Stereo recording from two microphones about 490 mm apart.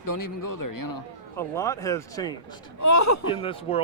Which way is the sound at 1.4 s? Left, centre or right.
Centre.